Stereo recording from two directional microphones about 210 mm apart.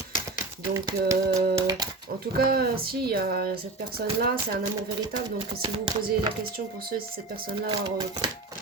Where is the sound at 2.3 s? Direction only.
45° right (ahead or behind).